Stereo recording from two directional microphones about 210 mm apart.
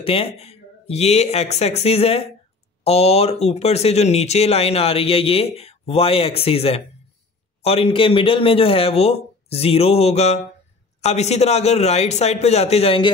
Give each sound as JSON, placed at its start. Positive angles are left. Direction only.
{"t": 0.0, "sound": "a man's voice", "side_deg": 25}